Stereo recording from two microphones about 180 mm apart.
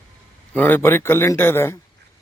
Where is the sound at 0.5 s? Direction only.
10° left (ahead or behind).